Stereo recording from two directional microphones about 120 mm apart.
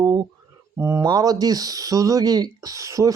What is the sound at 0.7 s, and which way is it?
Speech, 20° right (ahead or behind).